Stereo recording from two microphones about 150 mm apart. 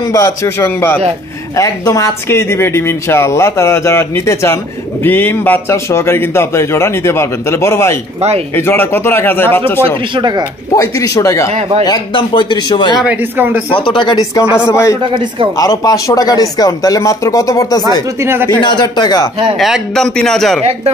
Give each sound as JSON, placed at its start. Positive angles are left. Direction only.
{"t": 0.1, "sound": "a man's voice", "side_deg": 20}
{"t": 10.1, "sound": "speech", "side_deg": -30}
{"t": 10.8, "sound": "speech", "side_deg": 20}
{"t": 13.0, "sound": "speech", "side_deg": -10}
{"t": 13.8, "sound": "speech", "side_deg": 30}
{"t": 15.0, "sound": "speech", "side_deg": -35}
{"t": 15.5, "sound": "speech", "side_deg": 25}
{"t": 18.2, "sound": "speech", "side_deg": -15}
{"t": 18.6, "sound": "speech", "side_deg": 30}
{"t": 19.6, "sound": "speech", "side_deg": 0}